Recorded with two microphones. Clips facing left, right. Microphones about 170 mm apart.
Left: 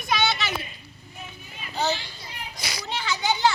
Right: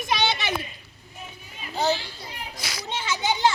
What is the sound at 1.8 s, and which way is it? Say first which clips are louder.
Children playing: right 2 dB; 5° right (ahead or behind).